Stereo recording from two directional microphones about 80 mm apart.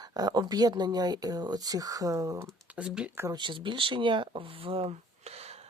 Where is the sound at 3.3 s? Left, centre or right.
Right.